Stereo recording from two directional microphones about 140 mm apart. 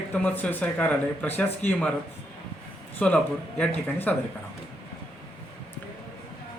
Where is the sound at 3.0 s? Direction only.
10° left (ahead or behind).